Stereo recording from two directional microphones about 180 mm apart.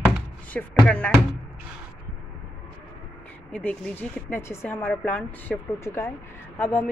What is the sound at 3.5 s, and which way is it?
A woman's voice, 10° left (ahead or behind).